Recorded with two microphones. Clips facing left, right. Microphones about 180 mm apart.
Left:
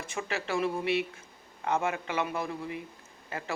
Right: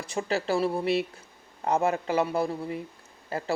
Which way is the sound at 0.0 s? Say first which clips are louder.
Right 6 dB; 35° right (ahead or behind).